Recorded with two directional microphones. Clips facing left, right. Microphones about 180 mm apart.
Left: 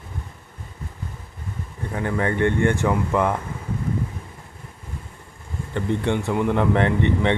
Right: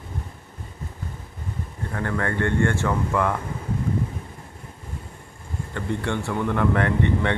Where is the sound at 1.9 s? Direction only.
15° left (ahead or behind).